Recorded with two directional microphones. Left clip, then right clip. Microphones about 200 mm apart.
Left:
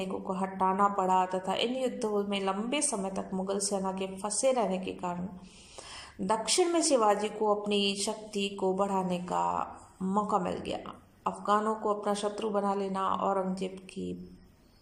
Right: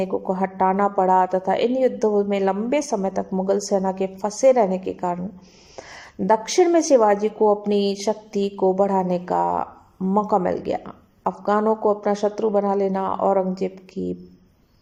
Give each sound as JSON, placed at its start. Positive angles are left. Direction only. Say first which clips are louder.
{"t": 0.0, "sound": "a woman's voice", "louder": "right 11 dB", "side_deg": -35}